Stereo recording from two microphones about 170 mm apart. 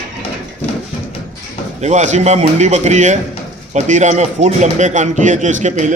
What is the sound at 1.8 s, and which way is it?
A man's voice, 45° right (ahead or behind).